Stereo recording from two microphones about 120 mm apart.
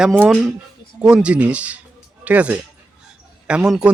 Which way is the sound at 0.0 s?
10° right (ahead or behind).